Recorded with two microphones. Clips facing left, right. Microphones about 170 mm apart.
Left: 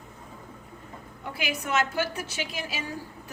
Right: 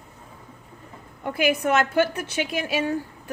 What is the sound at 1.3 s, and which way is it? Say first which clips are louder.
A woman's voice: right 8 dB; 50° right (ahead or behind).